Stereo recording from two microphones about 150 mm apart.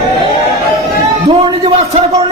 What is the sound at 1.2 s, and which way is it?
A man's voice, 40° right (ahead or behind).